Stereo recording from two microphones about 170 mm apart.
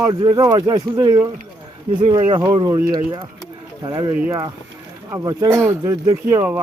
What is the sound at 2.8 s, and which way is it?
Speech, 60° right (ahead or behind).